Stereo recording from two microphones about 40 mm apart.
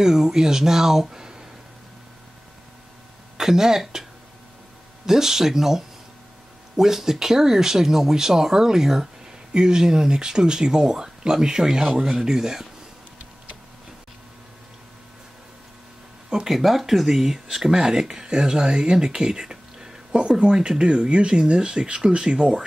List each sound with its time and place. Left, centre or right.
0.0 s speech: centre
3.3 s speech: centre
5.0 s speech: centre
16.4 s speech: centre; by 22.5 s right